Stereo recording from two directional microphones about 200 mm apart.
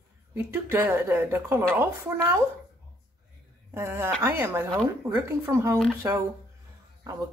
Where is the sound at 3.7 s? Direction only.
10° right (ahead or behind).